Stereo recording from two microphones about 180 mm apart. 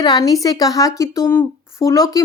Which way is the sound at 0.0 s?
20° left (ahead or behind).